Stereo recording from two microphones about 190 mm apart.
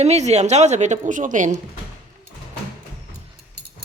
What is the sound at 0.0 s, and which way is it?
A woman's voice, 35° right (ahead or behind).